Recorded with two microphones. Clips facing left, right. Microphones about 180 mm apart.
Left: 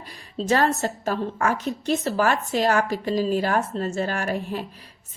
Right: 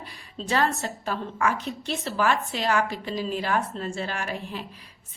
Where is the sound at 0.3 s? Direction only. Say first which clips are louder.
Left 4 dB; 45° left (ahead or behind).